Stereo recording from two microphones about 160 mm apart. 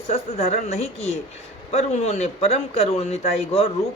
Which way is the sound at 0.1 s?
40° left (ahead or behind).